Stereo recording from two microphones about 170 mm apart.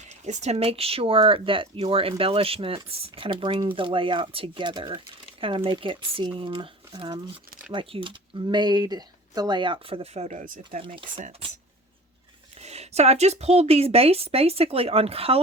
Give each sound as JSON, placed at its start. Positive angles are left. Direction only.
{"t": 0.3, "sound": "speech", "side_deg": -40}
{"t": 10.8, "sound": "speech", "side_deg": -30}
{"t": 12.6, "sound": "speech", "side_deg": -40}